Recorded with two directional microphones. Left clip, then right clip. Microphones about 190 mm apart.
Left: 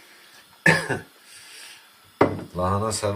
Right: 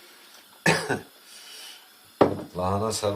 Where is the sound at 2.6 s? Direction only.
Centre (ahead or behind).